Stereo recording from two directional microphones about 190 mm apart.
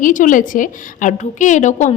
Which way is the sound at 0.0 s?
45° left (ahead or behind).